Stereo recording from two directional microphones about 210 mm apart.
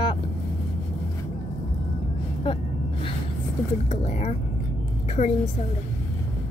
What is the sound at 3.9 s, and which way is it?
Speech, 35° left (ahead or behind).